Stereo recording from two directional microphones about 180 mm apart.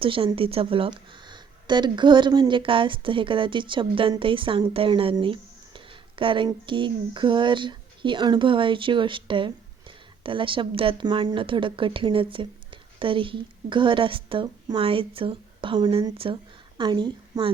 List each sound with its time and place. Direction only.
0.0 s speech: 30° right (ahead or behind)